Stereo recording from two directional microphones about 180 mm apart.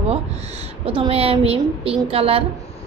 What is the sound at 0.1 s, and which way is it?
A woman's voice, 35° right (ahead or behind).